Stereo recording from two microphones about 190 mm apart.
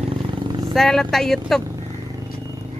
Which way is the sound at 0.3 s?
25° right (ahead or behind).